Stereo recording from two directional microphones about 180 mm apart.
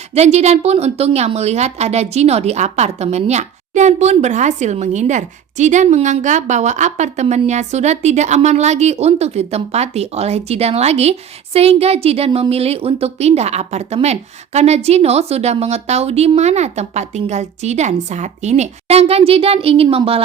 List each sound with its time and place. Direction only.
0.1 s a woman's voice: 35° right (ahead or behind)